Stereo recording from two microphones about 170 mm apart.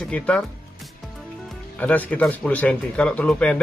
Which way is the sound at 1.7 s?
10° left (ahead or behind).